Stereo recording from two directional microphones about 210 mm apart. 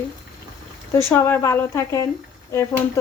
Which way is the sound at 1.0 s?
10° left (ahead or behind).